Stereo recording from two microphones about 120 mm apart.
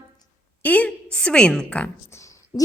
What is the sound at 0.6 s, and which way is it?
A woman's voice, 15° left (ahead or behind).